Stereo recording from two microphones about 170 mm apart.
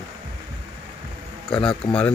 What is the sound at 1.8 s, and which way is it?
Speech, 30° left (ahead or behind).